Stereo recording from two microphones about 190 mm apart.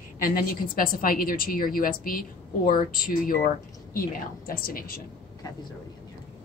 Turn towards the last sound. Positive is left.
turn(degrees=50)  # may be behind; listen again after turning